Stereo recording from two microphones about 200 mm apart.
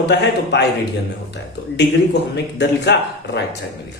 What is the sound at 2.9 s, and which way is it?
Speech, 60° left (ahead or behind).